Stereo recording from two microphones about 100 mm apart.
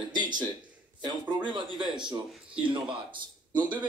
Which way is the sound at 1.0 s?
50° right (ahead or behind).